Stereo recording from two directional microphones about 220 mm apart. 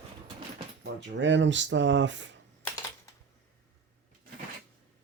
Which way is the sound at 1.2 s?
55° right (ahead or behind).